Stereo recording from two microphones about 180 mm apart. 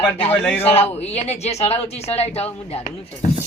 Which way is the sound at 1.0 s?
35° left (ahead or behind).